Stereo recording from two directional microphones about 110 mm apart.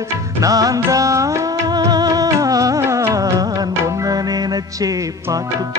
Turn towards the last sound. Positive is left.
turn(degrees=-35)  # may be behind; listen again after turning